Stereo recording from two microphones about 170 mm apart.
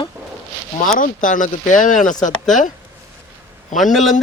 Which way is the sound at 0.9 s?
50° left (ahead or behind).